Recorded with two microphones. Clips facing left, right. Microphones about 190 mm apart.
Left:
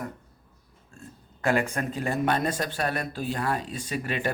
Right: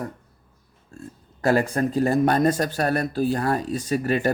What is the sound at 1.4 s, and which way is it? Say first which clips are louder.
Speech: right 5 dB; 35° right (ahead or behind).